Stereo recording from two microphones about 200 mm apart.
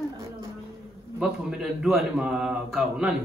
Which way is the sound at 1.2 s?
5° right (ahead or behind).